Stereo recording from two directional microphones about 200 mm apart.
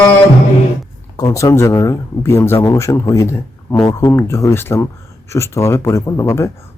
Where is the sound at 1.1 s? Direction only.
15° left (ahead or behind).